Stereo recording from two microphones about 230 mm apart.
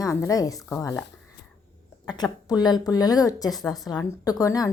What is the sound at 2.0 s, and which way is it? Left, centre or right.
Speech, centre.